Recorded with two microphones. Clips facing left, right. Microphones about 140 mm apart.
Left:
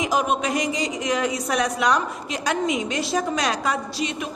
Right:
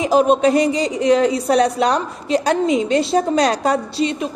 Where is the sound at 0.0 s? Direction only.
30° right (ahead or behind).